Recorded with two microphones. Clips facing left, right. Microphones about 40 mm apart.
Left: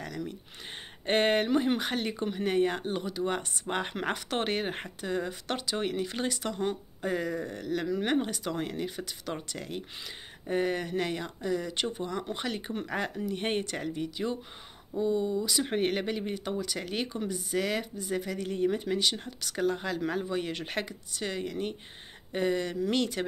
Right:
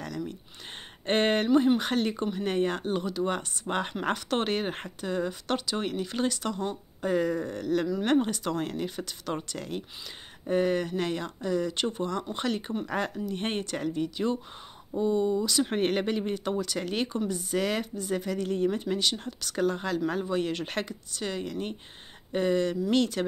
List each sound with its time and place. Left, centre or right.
1.0 s speech: centre
7.1 s speech: centre
14.9 s speech: centre
15.4 s speech: centre
15.7 s speech: centre; by 19.5 s left
19.5 s speech: centre